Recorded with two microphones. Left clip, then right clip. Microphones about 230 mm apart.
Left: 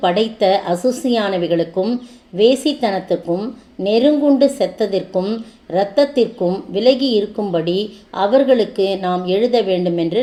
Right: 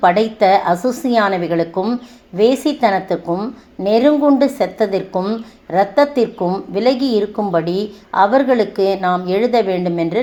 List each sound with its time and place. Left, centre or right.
0.0 s a woman's voice: centre